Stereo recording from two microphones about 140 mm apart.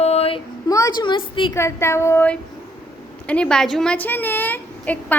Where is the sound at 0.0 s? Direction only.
50° left (ahead or behind).